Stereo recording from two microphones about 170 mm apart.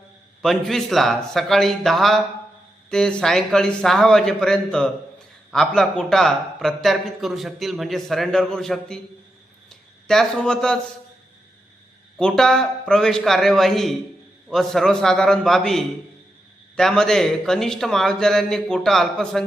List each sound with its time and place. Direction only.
0.4 s a man's voice: centre (ahead or behind)
12.1 s a man's voice: 5° left (ahead or behind)